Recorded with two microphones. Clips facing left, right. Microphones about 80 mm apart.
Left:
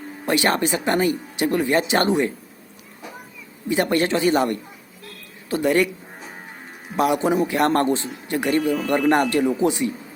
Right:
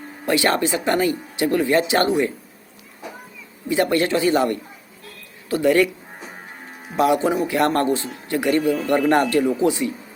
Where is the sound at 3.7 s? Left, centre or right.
Left.